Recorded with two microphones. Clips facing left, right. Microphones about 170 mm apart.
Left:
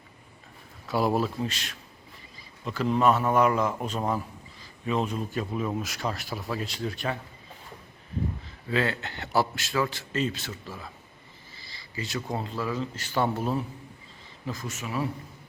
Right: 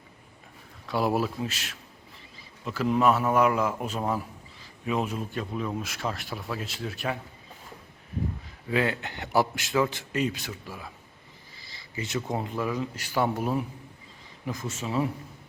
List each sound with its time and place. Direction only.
0.9 s speech: centre (ahead or behind)
8.7 s a man's voice: 15° right (ahead or behind)